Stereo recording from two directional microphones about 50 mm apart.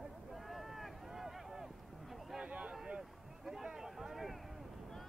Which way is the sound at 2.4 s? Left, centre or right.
Right.